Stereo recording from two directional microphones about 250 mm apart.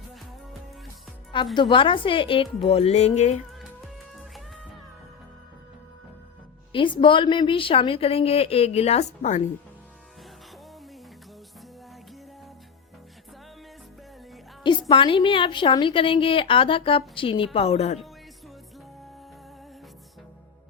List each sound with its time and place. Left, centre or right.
1.5 s a woman's voice: centre
4.1 s music: centre
6.7 s a woman's voice: centre
14.6 s a woman's voice: centre